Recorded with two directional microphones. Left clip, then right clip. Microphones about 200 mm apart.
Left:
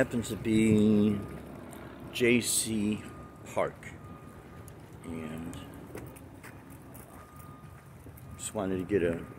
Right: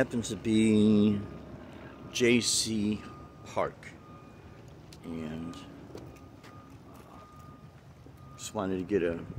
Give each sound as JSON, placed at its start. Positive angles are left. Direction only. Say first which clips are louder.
{"t": 0.0, "sound": "speech", "louder": "even", "side_deg": -15}
{"t": 5.0, "sound": "speech", "louder": "right 1 dB", "side_deg": -25}
{"t": 8.4, "sound": "speech", "louder": "even", "side_deg": -15}